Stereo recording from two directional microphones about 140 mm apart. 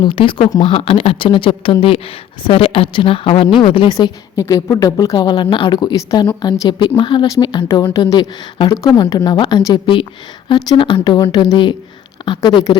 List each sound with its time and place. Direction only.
0.0 s speech: 40° left (ahead or behind)
3.9 s a woman's voice: 25° left (ahead or behind)